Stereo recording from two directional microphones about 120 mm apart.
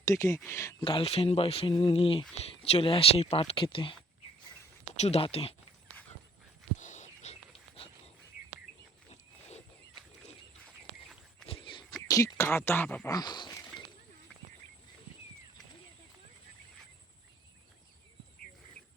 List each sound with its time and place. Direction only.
0.0 s speech: 25° left (ahead or behind)
0.3 s speech: 15° left (ahead or behind)
0.6 s speech: 25° left (ahead or behind)
0.9 s speech: 50° left (ahead or behind)
4.9 s speech: 60° left (ahead or behind)
6.7 s whispering: 85° left
9.0 s a sound: 65° left (ahead or behind)
11.4 s walk: 50° left (ahead or behind)
12.0 s speech: 25° left (ahead or behind)
13.1 s a sound: 35° left (ahead or behind)